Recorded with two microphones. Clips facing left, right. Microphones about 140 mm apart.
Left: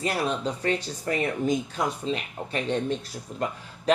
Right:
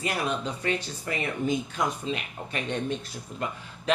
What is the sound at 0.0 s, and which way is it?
Speech, 35° left (ahead or behind).